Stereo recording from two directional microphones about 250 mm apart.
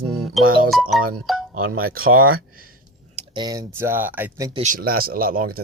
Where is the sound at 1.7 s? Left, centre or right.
Right.